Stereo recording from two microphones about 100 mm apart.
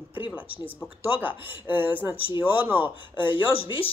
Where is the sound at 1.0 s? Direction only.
20° right (ahead or behind).